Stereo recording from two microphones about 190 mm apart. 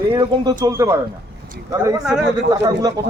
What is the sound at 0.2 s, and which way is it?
Speech, 20° right (ahead or behind).